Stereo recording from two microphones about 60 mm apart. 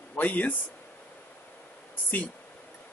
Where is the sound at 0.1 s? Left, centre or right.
Left.